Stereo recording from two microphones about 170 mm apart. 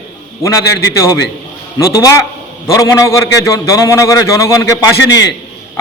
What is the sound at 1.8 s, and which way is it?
Speech, 20° left (ahead or behind).